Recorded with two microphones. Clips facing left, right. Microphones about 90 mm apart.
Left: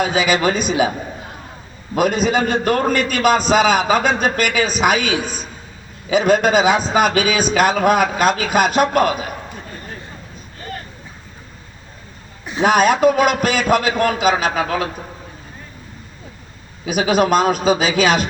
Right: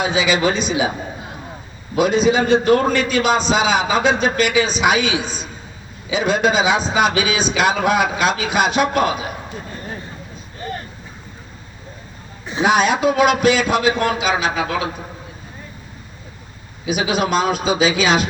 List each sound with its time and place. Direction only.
0.0 s a man's voice: 45° left (ahead or behind)
2.0 s a man's voice: 50° left (ahead or behind)
12.6 s a man's voice: 50° left (ahead or behind)
16.8 s a man's voice: 45° left (ahead or behind)